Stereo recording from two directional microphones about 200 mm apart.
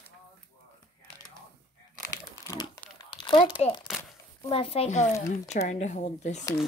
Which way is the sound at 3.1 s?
25° left (ahead or behind).